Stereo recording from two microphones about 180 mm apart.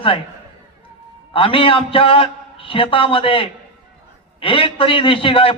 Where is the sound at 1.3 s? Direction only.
30° left (ahead or behind).